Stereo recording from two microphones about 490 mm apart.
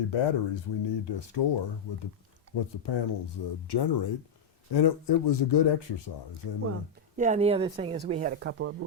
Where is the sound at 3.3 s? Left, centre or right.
Left.